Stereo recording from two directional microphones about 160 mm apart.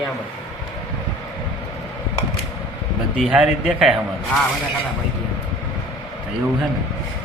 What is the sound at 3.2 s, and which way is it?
Speech, 5° right (ahead or behind).